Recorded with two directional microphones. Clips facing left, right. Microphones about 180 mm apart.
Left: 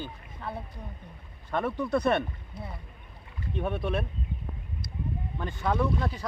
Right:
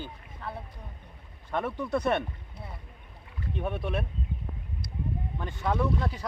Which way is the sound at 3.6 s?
10° right (ahead or behind).